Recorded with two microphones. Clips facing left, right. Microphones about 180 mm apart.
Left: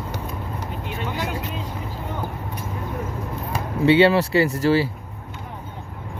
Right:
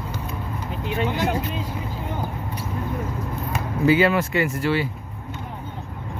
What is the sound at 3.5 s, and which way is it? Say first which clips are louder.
Speech: left 3 dB; 30° left (ahead or behind).